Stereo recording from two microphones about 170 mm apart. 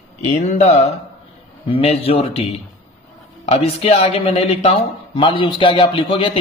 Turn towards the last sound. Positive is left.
turn(degrees=30)  # may be behind; listen again after turning